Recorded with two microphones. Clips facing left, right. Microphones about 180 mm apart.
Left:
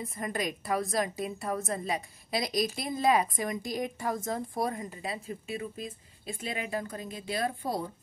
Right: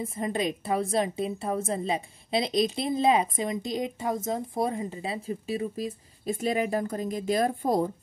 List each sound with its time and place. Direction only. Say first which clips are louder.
0.0 s a woman's voice: right 5 dB; 25° right (ahead or behind); by 7.9 s 50° right (ahead or behind)